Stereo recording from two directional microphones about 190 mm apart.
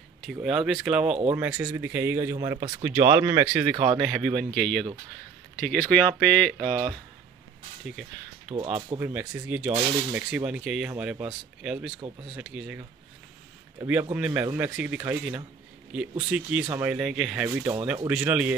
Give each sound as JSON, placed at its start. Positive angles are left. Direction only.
{"t": 0.3, "sound": "speech", "side_deg": -5}
{"t": 6.6, "sound": "speech", "side_deg": -25}
{"t": 8.5, "sound": "speech", "side_deg": -30}
{"t": 9.0, "sound": "speech", "side_deg": -10}
{"t": 14.1, "sound": "speech", "side_deg": -10}